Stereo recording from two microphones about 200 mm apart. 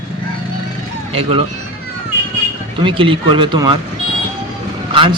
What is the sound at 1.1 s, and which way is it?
Speech, 30° right (ahead or behind).